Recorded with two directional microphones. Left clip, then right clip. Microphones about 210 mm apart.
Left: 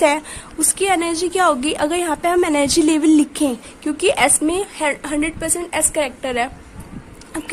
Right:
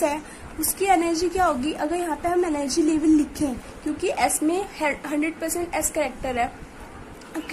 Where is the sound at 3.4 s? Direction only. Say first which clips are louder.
Left 7 dB; 80° left.